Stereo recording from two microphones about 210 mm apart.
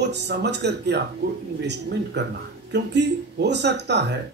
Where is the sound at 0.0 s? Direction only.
55° right (ahead or behind).